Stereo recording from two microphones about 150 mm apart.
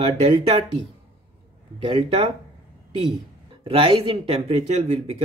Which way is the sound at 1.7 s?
35° right (ahead or behind).